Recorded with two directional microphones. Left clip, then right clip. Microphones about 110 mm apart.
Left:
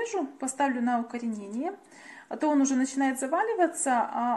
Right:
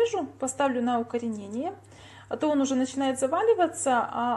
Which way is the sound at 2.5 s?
15° right (ahead or behind).